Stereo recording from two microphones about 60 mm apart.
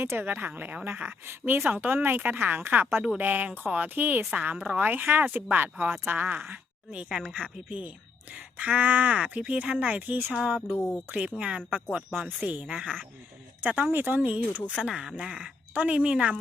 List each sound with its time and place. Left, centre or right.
0.0 s speech: right
0.3 s speech: right
1.3 s speech: right
6.5 s a woman's voice: right
10.8 s speech: left
11.1 s speech: right
12.1 s speech: centre
12.6 s speech: centre; by 14.2 s right
14.2 s speech: right
14.7 s speech: centre
15.7 s speech: right